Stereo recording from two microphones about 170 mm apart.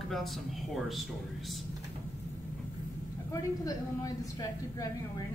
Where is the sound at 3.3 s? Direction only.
20° left (ahead or behind).